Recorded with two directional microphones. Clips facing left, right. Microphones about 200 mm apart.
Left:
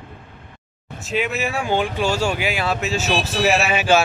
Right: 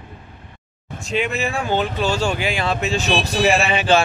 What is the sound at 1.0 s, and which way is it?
Speech, 5° left (ahead or behind).